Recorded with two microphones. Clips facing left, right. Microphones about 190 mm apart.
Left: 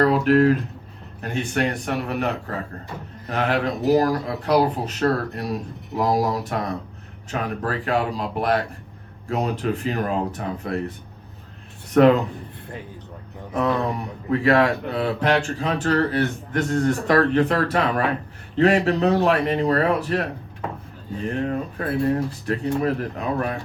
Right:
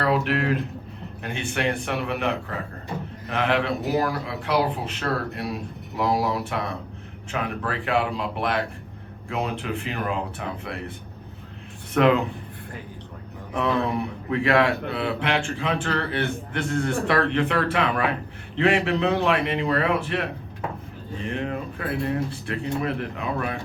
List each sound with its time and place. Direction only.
0.0 s speech: 40° left (ahead or behind)
11.9 s speech: 40° left (ahead or behind)
13.5 s speech: 40° left (ahead or behind)
21.2 s speech: 40° left (ahead or behind)